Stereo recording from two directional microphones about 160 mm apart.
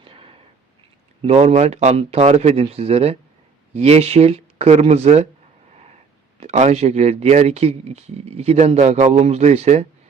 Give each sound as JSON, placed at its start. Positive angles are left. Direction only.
{"t": 0.0, "sound": "a sound", "side_deg": -35}
{"t": 1.2, "sound": "speech", "side_deg": -40}
{"t": 6.4, "sound": "speech", "side_deg": -45}